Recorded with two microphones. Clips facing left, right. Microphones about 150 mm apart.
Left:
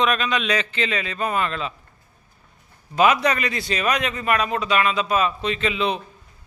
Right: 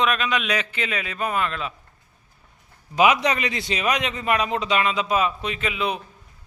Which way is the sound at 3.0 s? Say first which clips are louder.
Left 1 dB; 15° right (ahead or behind).